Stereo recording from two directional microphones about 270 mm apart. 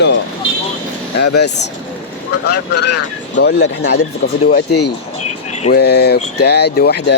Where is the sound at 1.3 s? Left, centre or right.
Left.